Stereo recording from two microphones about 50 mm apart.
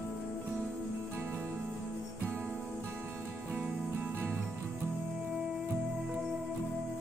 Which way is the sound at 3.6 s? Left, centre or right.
Right.